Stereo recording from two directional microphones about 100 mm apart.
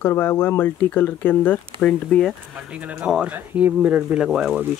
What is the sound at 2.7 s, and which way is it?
Speech, 15° right (ahead or behind).